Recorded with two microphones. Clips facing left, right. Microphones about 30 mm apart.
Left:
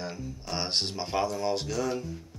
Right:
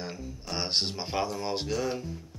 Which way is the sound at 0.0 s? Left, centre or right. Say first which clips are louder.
Left 1 dB; centre.